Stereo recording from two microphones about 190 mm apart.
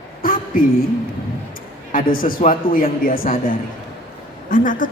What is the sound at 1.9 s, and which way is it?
A man's voice, 50° left (ahead or behind).